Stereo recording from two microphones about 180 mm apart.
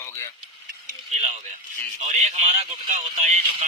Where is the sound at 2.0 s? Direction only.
40° right (ahead or behind).